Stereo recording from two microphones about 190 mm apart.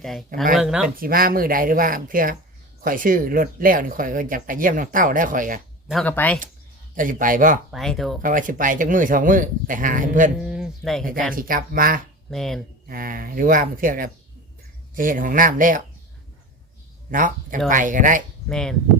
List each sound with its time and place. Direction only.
0.0 s speech: centre (ahead or behind)
0.9 s speech: 50° right (ahead or behind)
5.9 s speech: 5° left (ahead or behind)
6.9 s speech: 45° right (ahead or behind)
7.7 s speech: centre (ahead or behind)
8.2 s speech: 45° right (ahead or behind)
10.4 s a sound: 5° right (ahead or behind)
11.3 s speech: 50° right (ahead or behind)
12.3 s speech: centre (ahead or behind)
12.9 s speech: 50° right (ahead or behind)
17.1 s speech: 45° right (ahead or behind)
18.4 s speech: 5° left (ahead or behind)